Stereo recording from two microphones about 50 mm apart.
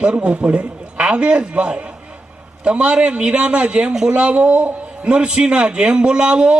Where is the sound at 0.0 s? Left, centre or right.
Right.